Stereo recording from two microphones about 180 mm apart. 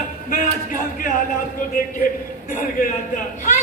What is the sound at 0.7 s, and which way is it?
A man's voice, 45° left (ahead or behind).